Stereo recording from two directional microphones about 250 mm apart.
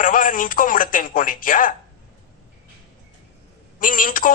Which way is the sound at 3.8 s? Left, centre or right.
Left.